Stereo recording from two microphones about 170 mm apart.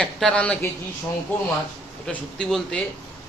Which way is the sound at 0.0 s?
5° left (ahead or behind).